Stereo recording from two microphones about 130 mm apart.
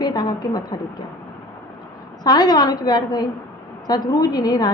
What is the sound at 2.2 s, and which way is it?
A woman's voice, 35° left (ahead or behind).